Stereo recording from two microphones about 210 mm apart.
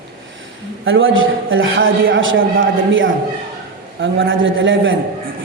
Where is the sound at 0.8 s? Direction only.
70° right (ahead or behind).